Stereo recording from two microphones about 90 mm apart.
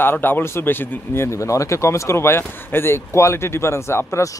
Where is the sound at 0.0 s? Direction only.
25° left (ahead or behind).